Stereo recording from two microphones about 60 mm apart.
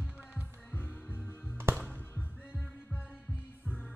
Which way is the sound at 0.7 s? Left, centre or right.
Left.